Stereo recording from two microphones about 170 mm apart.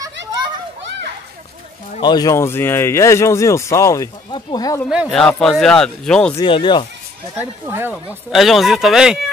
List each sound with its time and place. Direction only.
2.0 s speech: 25° left (ahead or behind)
4.8 s speech: centre (ahead or behind)
6.3 s speech: 30° left (ahead or behind)
7.3 s speech: 10° right (ahead or behind)
7.9 s speech: centre (ahead or behind)